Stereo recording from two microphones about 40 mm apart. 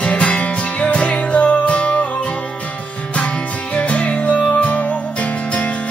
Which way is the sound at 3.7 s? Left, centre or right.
Left.